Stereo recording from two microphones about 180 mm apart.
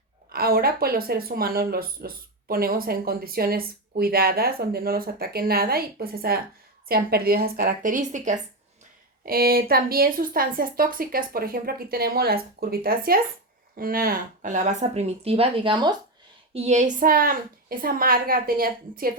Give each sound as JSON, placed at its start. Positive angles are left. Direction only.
{"t": 0.3, "sound": "a woman's voice", "side_deg": -60}
{"t": 9.2, "sound": "a woman's voice", "side_deg": -55}
{"t": 16.6, "sound": "a woman's voice", "side_deg": -40}